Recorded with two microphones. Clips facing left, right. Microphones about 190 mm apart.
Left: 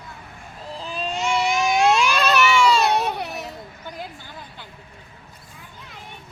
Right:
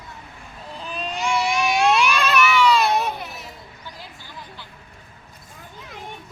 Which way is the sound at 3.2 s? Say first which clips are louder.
Left 5 dB; 65° left (ahead or behind).